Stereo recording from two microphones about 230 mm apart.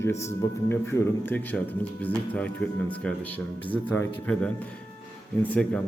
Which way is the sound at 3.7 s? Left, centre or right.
Centre.